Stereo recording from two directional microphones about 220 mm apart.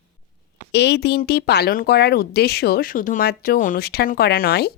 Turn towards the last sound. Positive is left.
turn(degrees=45)  # may be behind; listen again after turning